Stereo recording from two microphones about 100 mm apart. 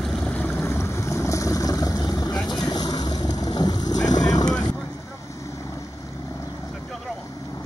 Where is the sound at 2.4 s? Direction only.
45° left (ahead or behind).